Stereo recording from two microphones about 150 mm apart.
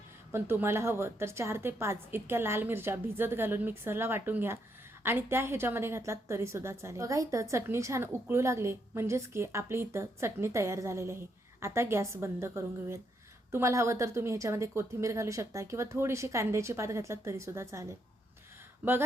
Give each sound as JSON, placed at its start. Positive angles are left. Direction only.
{"t": 0.3, "sound": "a woman's voice", "side_deg": -15}